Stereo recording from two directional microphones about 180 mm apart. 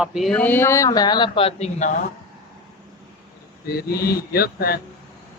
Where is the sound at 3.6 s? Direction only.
60° left (ahead or behind).